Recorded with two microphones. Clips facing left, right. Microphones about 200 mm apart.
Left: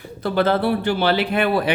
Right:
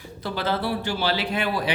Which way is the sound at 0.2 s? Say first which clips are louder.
Left 8 dB; 55° left (ahead or behind).